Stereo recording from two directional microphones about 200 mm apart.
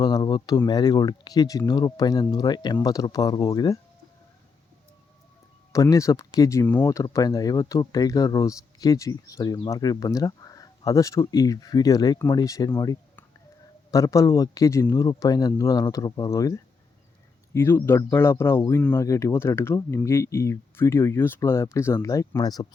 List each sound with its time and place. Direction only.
0.0 s speech: 20° left (ahead or behind)
5.7 s speech: 15° left (ahead or behind)